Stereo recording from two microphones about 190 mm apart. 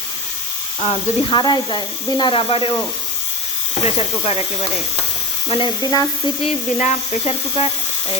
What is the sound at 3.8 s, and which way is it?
Speech, 30° left (ahead or behind).